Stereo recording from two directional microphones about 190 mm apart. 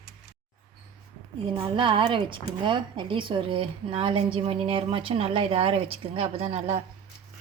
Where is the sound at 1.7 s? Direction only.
25° right (ahead or behind).